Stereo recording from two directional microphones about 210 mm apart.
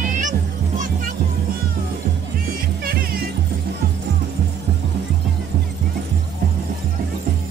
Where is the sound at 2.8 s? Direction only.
45° right (ahead or behind).